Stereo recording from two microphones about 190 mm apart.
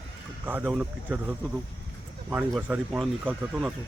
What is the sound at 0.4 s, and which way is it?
Speech, 10° right (ahead or behind).